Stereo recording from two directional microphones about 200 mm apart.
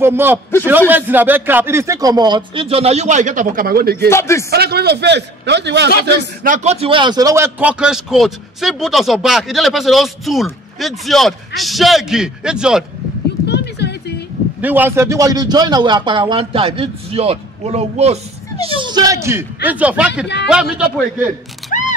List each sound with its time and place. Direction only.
0.0 s a man's voice: 10° right (ahead or behind); by 4.1 s 50° right (ahead or behind)
4.1 s speech: 15° left (ahead or behind)
4.5 s a man's voice: 55° right (ahead or behind)
6.0 s speech: 40° right (ahead or behind); by 12.8 s 5° right (ahead or behind)
13.5 s a sound: 55° left (ahead or behind)
14.6 s a man's voice: 10° right (ahead or behind)
21.7 s a sound: 40° left (ahead or behind)